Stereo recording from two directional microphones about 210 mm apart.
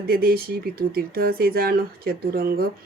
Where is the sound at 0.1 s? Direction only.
45° right (ahead or behind).